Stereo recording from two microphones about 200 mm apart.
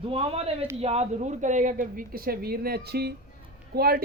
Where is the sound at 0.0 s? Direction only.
30° right (ahead or behind).